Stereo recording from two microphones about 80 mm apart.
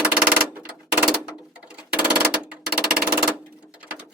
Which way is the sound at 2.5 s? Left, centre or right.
Centre.